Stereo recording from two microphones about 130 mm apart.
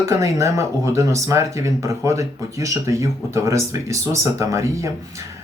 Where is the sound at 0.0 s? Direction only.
25° right (ahead or behind).